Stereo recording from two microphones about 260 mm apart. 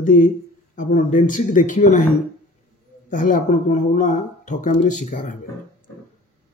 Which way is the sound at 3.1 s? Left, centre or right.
Left.